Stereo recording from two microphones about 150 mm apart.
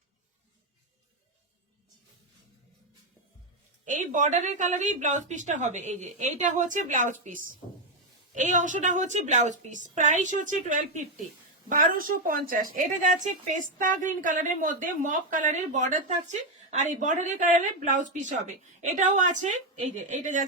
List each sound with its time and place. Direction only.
3.8 s a woman's voice: 60° right (ahead or behind)